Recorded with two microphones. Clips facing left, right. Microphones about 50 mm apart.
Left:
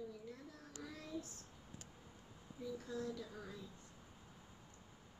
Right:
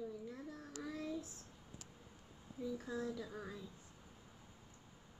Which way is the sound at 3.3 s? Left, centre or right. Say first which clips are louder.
Right 3 dB; centre.